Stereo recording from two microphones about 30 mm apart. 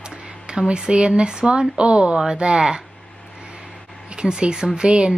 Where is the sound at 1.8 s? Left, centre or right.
Right.